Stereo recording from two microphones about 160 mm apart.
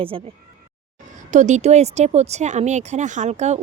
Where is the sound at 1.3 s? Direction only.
50° right (ahead or behind).